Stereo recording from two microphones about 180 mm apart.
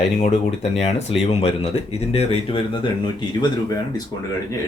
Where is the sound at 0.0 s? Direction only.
35° left (ahead or behind).